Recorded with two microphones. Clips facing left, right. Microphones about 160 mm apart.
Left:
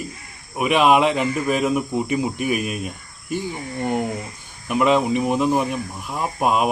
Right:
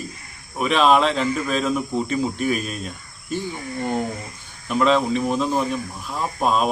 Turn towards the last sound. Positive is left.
turn(degrees=15)  # may be behind; listen again after turning